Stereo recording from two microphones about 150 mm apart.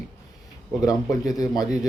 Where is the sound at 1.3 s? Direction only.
25° left (ahead or behind).